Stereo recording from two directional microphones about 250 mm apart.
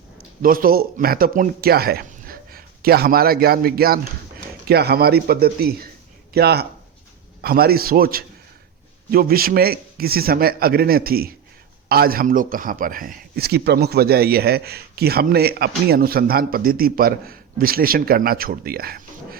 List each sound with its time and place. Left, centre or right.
0.4 s a man's voice: right